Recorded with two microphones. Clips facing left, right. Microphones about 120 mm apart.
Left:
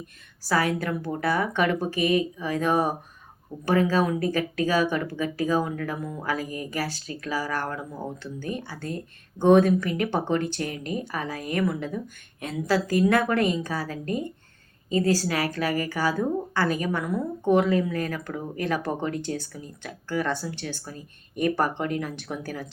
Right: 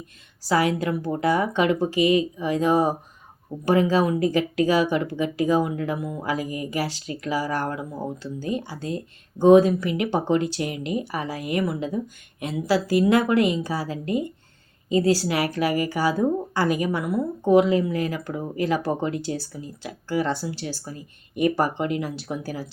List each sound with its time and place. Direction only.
0.4 s a woman's voice: 15° right (ahead or behind)